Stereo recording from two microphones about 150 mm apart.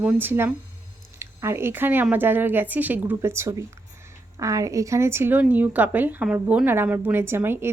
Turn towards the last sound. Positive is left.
turn(degrees=-15)  # may be behind; listen again after turning